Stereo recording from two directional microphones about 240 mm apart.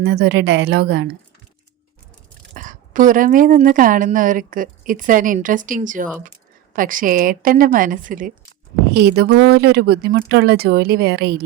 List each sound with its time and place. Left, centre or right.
0.0 s a woman's voice: right
2.6 s a woman's voice: right